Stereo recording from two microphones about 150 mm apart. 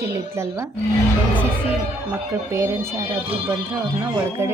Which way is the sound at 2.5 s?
20° right (ahead or behind).